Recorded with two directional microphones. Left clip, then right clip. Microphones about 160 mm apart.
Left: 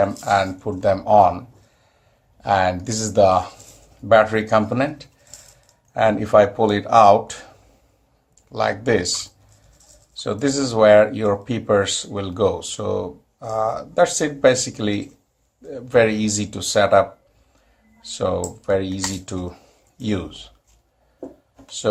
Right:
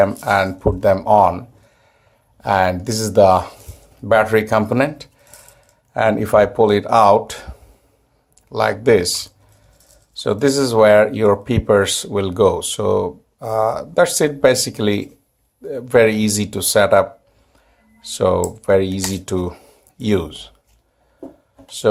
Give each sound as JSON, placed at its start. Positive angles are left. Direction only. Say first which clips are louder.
{"t": 0.0, "sound": "speech", "louder": "right 3 dB", "side_deg": -50}